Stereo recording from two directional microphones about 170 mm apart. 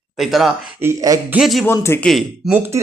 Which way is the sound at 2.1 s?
Centre (ahead or behind).